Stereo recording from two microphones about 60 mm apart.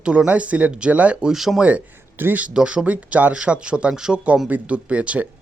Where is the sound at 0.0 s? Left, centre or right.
Centre.